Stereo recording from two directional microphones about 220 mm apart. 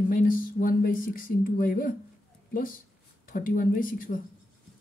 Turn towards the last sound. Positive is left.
turn(degrees=40)  # may be behind; listen again after turning